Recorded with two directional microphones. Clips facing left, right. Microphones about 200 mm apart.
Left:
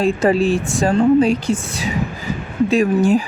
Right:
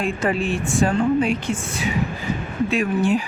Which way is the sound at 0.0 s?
40° left (ahead or behind).